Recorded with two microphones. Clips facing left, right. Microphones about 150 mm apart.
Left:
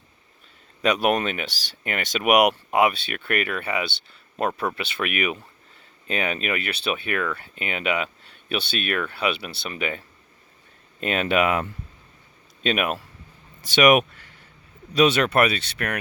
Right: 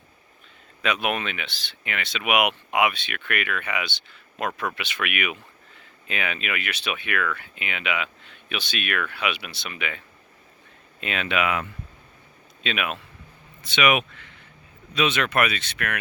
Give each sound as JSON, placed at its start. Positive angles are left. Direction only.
{"t": 0.8, "sound": "speech", "side_deg": 35}
{"t": 11.0, "sound": "speech", "side_deg": 45}